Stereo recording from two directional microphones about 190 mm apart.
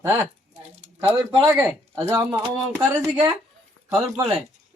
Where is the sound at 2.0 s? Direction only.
15° right (ahead or behind).